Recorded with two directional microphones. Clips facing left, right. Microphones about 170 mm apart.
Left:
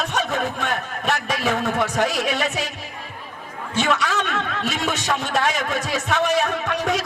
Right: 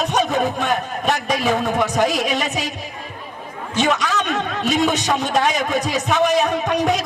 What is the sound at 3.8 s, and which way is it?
Speech, 20° right (ahead or behind).